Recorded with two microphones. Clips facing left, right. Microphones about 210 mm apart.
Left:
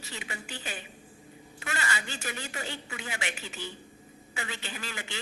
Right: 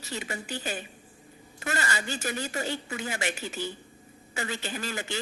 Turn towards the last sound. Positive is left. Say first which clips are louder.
# right 6 dB
turn(degrees=-40)  # may be behind; listen again after turning